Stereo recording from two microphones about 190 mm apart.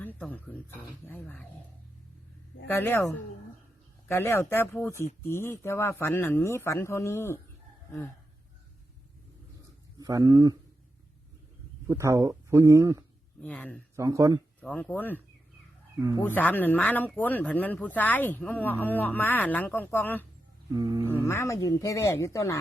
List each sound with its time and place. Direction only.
0.0 s speech: 10° left (ahead or behind)
2.6 s speech: 10° left (ahead or behind)
4.1 s speech: 10° left (ahead or behind)
10.0 s speech: 20° right (ahead or behind)
11.9 s speech: 15° right (ahead or behind)
13.4 s speech: 5° left (ahead or behind)
13.9 s speech: 15° right (ahead or behind)
14.6 s speech: 5° left (ahead or behind)
16.2 s speech: 10° left (ahead or behind)
20.7 s speech: 20° right (ahead or behind)
21.2 s speech: 15° left (ahead or behind)